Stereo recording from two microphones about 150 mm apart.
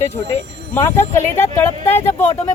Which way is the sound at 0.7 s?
15° left (ahead or behind).